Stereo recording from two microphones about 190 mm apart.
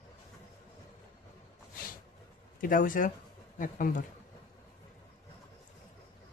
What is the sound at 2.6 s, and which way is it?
Speech, 45° left (ahead or behind).